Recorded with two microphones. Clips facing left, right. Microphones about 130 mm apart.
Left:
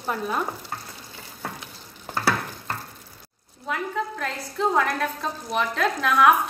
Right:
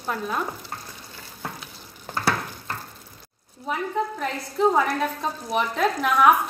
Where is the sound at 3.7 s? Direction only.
10° right (ahead or behind).